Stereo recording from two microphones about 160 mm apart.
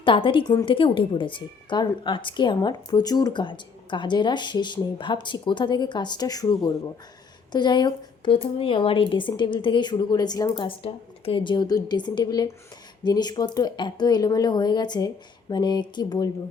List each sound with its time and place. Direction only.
0.0 s speech: 35° left (ahead or behind)